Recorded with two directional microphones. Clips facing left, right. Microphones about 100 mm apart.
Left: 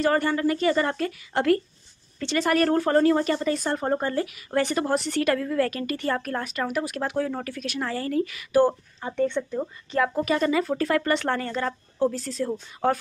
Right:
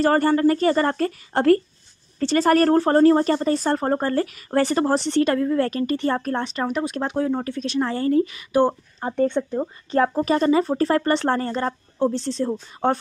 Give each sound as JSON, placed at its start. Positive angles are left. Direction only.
{"t": 0.0, "sound": "speech", "side_deg": -40}
{"t": 9.0, "sound": "speech", "side_deg": -40}